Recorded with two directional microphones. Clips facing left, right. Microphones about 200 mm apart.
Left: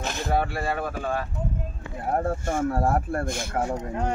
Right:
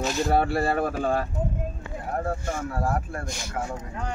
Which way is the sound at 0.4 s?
35° right (ahead or behind).